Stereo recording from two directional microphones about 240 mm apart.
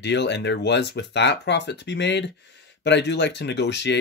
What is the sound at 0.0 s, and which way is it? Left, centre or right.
Speech, left.